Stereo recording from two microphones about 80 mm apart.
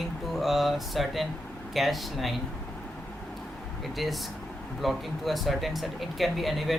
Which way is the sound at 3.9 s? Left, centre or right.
Centre.